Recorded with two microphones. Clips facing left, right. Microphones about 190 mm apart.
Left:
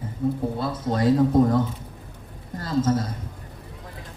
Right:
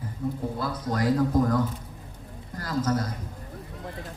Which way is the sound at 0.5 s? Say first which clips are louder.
Left 3 dB; 25° left (ahead or behind).